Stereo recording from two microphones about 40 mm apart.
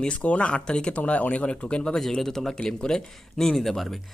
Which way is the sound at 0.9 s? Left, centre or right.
Left.